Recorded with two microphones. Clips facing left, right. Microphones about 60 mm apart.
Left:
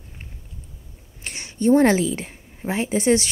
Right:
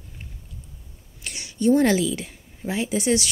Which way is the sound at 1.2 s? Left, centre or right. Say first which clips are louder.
Left 1 dB; left.